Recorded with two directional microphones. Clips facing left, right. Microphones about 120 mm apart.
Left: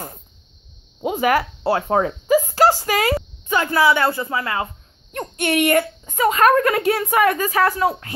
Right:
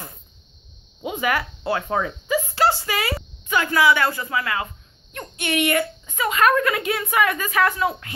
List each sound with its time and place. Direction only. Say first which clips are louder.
1.0 s speech: left 5 dB; 40° left (ahead or behind)
3.4 s a woman's voice: left 1 dB; 30° left (ahead or behind)
5.1 s a woman's voice: left 5 dB; 45° left (ahead or behind)